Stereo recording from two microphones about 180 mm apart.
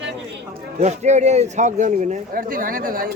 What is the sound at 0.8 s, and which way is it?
A man's voice, 40° right (ahead or behind).